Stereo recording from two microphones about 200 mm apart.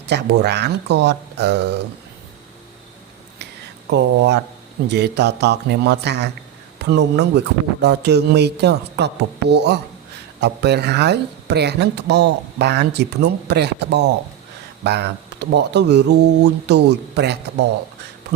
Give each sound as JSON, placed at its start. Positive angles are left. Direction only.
{"t": 0.1, "sound": "speech", "side_deg": -55}
{"t": 3.8, "sound": "speech", "side_deg": -60}